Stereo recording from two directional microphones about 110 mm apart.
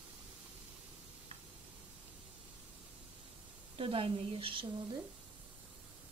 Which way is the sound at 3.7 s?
55° right (ahead or behind).